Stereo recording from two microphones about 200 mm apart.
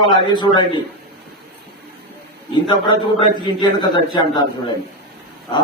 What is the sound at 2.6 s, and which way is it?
A man's voice, 25° left (ahead or behind).